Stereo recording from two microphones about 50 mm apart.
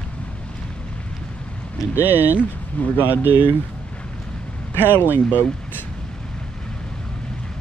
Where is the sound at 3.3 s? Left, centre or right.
Right.